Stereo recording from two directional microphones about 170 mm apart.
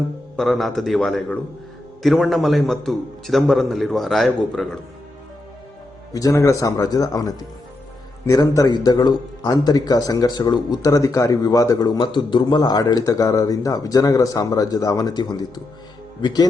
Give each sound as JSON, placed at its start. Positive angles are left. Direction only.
{"t": 0.3, "sound": "a man's voice", "side_deg": 0}
{"t": 6.1, "sound": "speech", "side_deg": 20}